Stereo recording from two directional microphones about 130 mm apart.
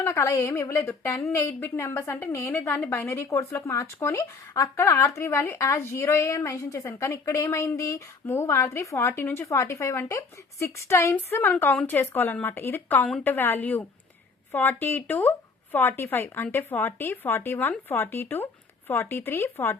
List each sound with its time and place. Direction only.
0.0 s speech: 20° left (ahead or behind)